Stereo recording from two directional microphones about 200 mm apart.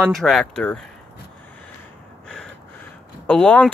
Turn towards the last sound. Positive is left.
turn(degrees=5)  # may be behind; listen again after turning